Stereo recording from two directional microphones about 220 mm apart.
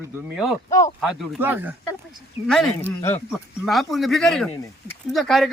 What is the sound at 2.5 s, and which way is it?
Speech, centre (ahead or behind).